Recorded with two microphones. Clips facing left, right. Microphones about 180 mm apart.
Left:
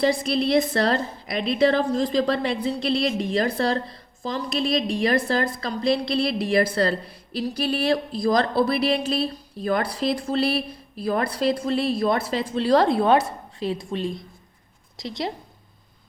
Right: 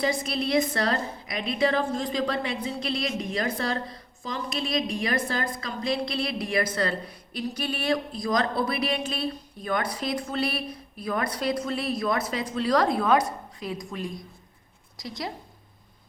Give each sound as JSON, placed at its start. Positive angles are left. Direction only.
{"t": 0.0, "sound": "a woman's voice", "side_deg": 35}